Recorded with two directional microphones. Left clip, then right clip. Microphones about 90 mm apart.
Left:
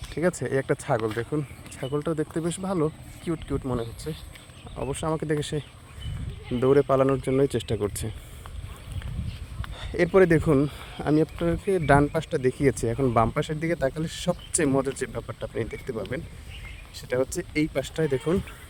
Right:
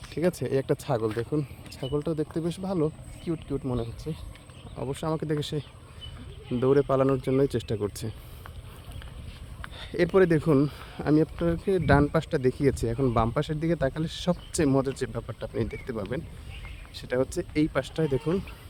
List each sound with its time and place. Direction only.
0.1 s speech: 20° right (ahead or behind)
2.0 s speech: 5° right (ahead or behind)
4.7 s speech: 10° right (ahead or behind)
9.7 s a sound: 15° right (ahead or behind)
10.1 s speech: centre (ahead or behind)
10.4 s speech: 30° right (ahead or behind); by 13.7 s centre (ahead or behind)
13.7 s speech: 10° left (ahead or behind); by 15.1 s 5° right (ahead or behind)
15.1 s speech: 20° right (ahead or behind)
16.9 s speech: 5° left (ahead or behind)
18.3 s speech: 5° right (ahead or behind)